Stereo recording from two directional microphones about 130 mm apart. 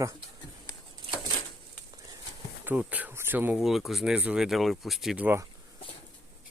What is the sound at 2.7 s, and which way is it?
Speech, 10° right (ahead or behind).